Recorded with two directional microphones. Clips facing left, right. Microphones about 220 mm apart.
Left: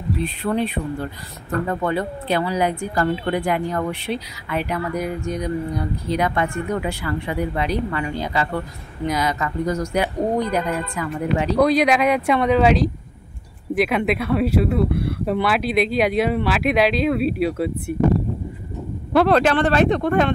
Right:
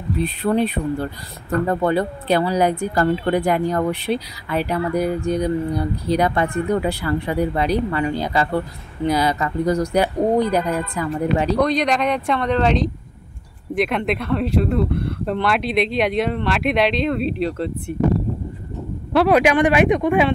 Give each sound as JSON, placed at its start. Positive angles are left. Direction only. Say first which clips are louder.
{"t": 0.2, "sound": "speech", "louder": "right 4 dB", "side_deg": -40}
{"t": 11.6, "sound": "speech", "louder": "left 2 dB", "side_deg": 5}
{"t": 19.1, "sound": "speech", "louder": "right 1 dB", "side_deg": -10}